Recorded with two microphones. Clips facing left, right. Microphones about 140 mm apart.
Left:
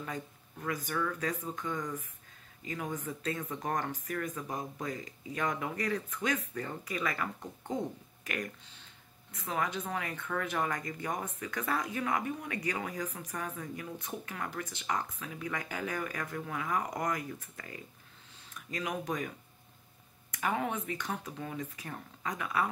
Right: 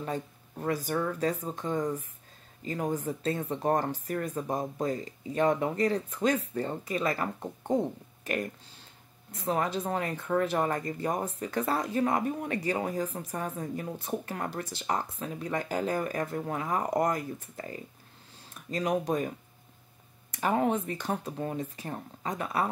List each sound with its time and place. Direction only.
0.0 s speech: 30° right (ahead or behind)